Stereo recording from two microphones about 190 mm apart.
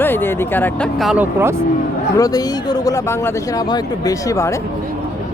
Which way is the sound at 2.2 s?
20° left (ahead or behind).